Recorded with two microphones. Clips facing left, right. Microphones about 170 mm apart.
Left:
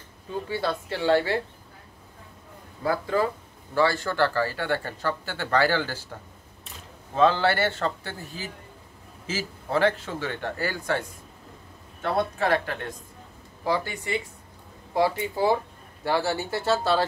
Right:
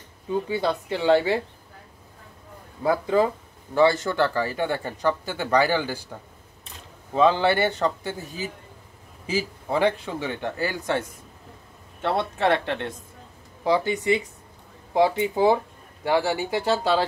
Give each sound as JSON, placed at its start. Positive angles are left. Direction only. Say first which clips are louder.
{"t": 0.5, "sound": "speech", "louder": "left 1 dB", "side_deg": -20}
{"t": 2.8, "sound": "speech", "louder": "right 4 dB", "side_deg": -20}
{"t": 7.2, "sound": "speech", "louder": "right 2 dB", "side_deg": -15}